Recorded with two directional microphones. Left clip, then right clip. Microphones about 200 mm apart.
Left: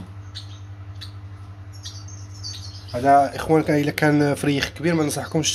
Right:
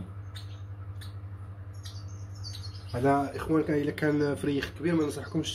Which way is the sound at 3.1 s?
45° left (ahead or behind).